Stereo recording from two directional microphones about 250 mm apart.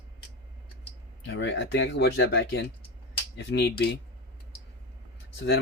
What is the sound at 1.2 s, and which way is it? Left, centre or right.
Speech, left.